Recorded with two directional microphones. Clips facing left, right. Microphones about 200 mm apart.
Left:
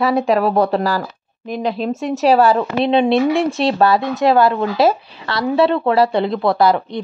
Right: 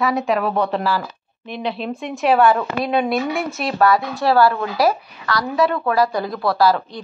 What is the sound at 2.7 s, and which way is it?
Speech, 25° left (ahead or behind).